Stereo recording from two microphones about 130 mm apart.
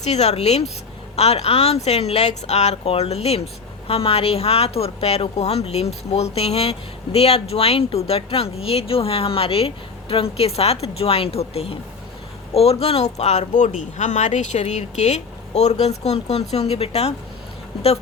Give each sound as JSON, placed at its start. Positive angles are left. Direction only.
{"t": 0.0, "sound": "a woman's voice", "side_deg": 55}